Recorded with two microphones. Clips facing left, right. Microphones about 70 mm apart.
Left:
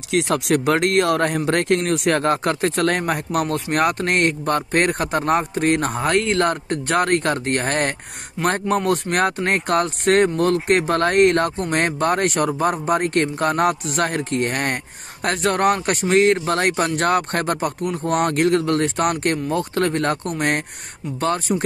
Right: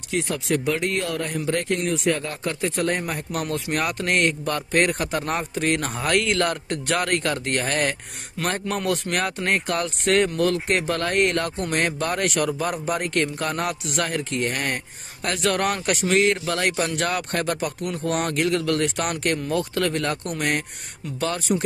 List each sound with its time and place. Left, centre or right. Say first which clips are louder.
0.1 s speech: left 5 dB; left
3.4 s speech: left 5 dB; left
5.9 s speech: left 3 dB; left
15.2 s speech: left 5 dB; left